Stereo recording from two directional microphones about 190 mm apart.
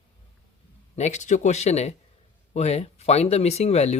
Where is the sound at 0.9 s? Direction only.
35° left (ahead or behind).